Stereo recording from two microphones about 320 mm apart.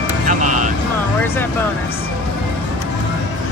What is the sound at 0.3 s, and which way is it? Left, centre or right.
Vehicle, right.